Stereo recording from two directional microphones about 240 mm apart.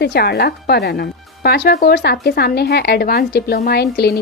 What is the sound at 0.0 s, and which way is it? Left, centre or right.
Speech, left.